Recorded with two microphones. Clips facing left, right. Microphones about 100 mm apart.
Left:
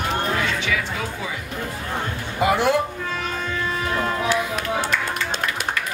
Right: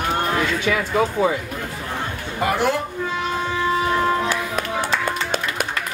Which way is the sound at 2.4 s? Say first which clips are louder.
Left 2 dB; 15° left (ahead or behind).